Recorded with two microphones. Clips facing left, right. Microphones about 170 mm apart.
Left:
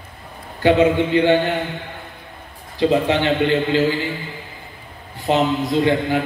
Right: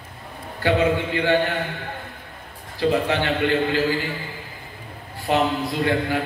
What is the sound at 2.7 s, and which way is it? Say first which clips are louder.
A man's voice: left 4 dB; 20° left (ahead or behind).